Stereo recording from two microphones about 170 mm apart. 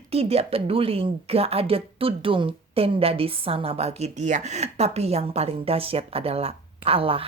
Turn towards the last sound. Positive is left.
turn(degrees=-35)  # may be behind; listen again after turning